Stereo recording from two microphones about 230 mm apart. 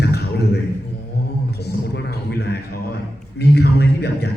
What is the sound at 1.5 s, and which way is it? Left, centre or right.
A man's voice, left.